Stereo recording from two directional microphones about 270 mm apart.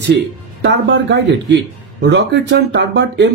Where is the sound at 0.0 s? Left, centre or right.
Right.